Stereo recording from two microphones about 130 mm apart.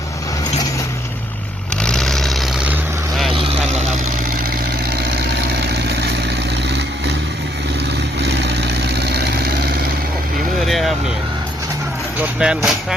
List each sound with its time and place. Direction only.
1.8 s vehicle: 5° left (ahead or behind)
3.3 s vehicle: 45° right (ahead or behind)
10.7 s vehicle: centre (ahead or behind)
12.4 s vehicle: 5° right (ahead or behind)